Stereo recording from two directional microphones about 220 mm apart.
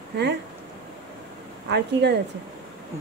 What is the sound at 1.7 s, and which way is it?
Speech, 50° right (ahead or behind).